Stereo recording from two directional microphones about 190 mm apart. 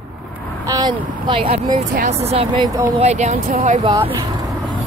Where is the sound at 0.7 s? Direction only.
20° right (ahead or behind).